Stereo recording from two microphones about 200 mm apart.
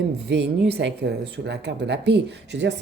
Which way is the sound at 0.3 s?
60° right (ahead or behind).